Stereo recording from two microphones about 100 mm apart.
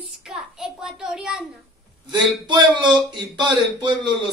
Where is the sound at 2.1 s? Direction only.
50° right (ahead or behind).